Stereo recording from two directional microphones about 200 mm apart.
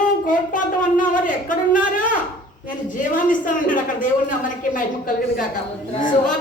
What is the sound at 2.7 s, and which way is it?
A woman's voice, 40° left (ahead or behind).